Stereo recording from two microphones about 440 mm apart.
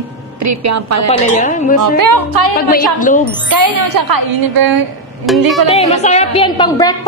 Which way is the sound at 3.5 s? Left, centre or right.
Right.